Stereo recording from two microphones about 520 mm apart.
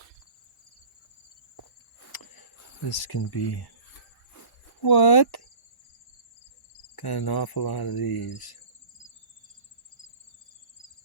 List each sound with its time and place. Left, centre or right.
2.1 s cricket: left
4.8 s cricket: left
6.9 s cricket: left